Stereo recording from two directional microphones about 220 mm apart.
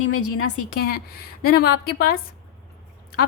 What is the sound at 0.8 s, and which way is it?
A woman's voice, 45° left (ahead or behind).